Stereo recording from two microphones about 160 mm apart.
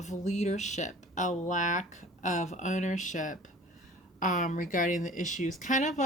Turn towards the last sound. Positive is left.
turn(degrees=50)  # may be behind; listen again after turning